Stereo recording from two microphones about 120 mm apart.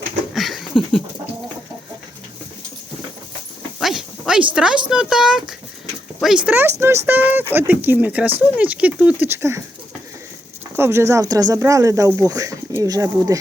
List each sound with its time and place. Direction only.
0.3 s a sound: centre (ahead or behind)
3.8 s a sound: centre (ahead or behind)
4.5 s speech: 5° right (ahead or behind)
6.7 s speech: 20° right (ahead or behind)
9.2 s speech: 20° right (ahead or behind)
10.8 s speech: 20° right (ahead or behind)